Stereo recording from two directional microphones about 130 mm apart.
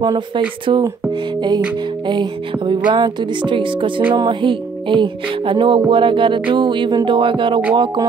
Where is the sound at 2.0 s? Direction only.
35° right (ahead or behind).